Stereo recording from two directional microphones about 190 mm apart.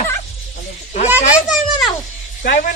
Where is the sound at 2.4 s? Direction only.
50° left (ahead or behind).